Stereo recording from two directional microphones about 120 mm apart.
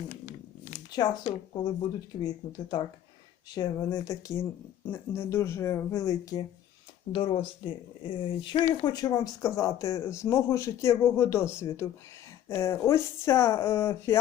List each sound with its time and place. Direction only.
0.1 s a sound: 90° left
0.9 s speech: 35° left (ahead or behind)
7.1 s speech: 45° left (ahead or behind)
8.8 s speech: 35° left (ahead or behind)